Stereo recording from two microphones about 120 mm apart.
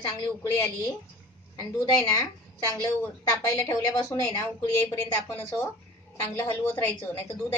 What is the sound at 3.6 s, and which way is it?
A woman's voice, 25° left (ahead or behind).